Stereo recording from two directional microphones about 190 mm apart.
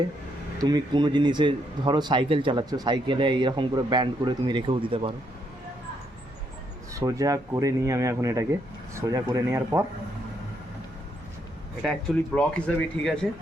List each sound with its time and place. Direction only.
0.6 s speech: 20° right (ahead or behind)
6.9 s speech: 15° right (ahead or behind)
11.8 s speech: centre (ahead or behind)